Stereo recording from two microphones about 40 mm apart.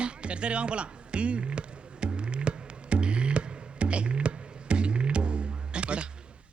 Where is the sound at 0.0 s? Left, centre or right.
Right.